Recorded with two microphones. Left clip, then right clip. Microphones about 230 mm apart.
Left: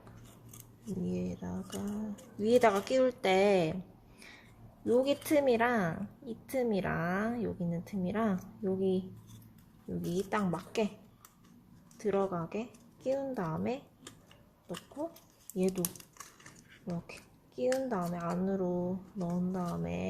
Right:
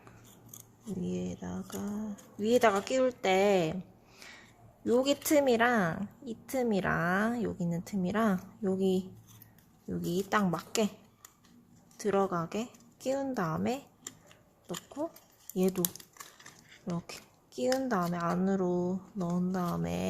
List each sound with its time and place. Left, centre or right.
1.0 s a woman's voice: centre
4.2 s a sound: centre
4.9 s a woman's voice: centre
11.9 s a woman's voice: centre